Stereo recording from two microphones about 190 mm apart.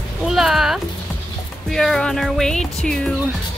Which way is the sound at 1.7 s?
Centre (ahead or behind).